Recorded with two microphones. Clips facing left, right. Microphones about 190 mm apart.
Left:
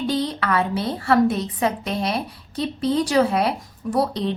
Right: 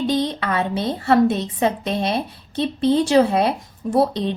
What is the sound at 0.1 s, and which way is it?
A woman's voice, 20° right (ahead or behind).